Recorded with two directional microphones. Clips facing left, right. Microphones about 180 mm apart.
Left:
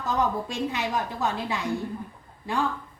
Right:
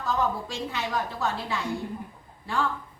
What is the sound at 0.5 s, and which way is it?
A child's voice, 15° left (ahead or behind).